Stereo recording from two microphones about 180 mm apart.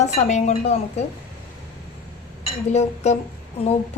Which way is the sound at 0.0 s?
40° left (ahead or behind).